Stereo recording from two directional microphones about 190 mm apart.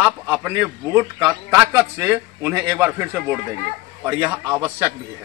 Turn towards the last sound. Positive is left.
turn(degrees=-10)  # may be behind; listen again after turning